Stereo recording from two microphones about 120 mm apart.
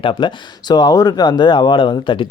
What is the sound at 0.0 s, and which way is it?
Speech, 45° left (ahead or behind).